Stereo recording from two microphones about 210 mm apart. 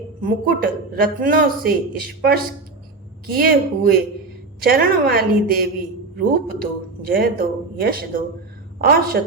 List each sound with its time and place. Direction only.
0.2 s speech: 40° right (ahead or behind)